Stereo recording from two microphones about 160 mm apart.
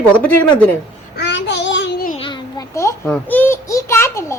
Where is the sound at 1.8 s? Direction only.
70° left (ahead or behind).